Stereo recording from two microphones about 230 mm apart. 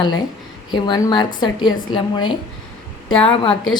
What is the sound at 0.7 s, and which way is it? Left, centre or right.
A woman's voice, centre.